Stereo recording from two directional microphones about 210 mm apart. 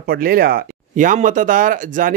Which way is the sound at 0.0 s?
45° right (ahead or behind).